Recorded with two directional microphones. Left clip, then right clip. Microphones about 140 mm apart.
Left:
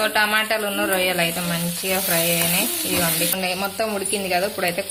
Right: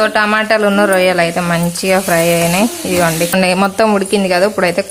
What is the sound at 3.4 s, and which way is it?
Speech, 90° right.